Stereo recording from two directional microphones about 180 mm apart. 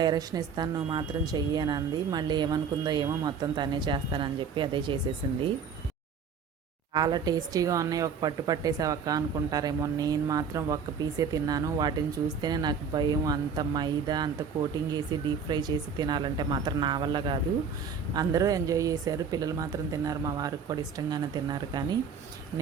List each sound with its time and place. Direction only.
0.0 s speech: 20° right (ahead or behind)
6.9 s speech: 20° right (ahead or behind)